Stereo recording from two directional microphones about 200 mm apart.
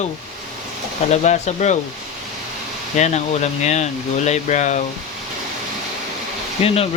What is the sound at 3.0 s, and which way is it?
Speech, 35° left (ahead or behind).